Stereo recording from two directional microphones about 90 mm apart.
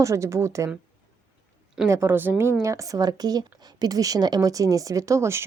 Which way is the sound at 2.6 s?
40° right (ahead or behind).